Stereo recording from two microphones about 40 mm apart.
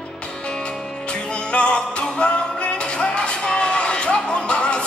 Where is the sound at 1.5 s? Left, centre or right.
Left.